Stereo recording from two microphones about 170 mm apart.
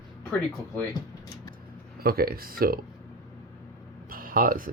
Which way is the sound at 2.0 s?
60° right (ahead or behind).